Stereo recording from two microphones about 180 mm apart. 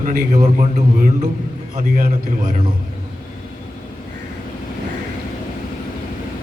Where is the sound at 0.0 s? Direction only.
50° right (ahead or behind).